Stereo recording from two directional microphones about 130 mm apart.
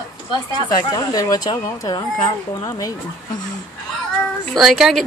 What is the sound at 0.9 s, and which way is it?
Speech, 30° left (ahead or behind).